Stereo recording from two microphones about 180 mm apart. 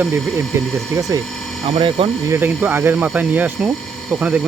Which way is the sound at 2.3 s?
10° right (ahead or behind).